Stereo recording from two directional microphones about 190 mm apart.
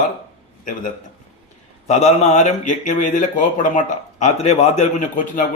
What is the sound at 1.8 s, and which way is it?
Speech, 35° left (ahead or behind).